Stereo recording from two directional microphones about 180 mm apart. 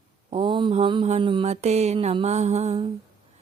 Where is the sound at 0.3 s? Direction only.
30° right (ahead or behind).